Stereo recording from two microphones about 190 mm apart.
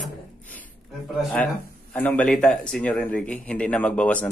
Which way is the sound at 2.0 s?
5° left (ahead or behind).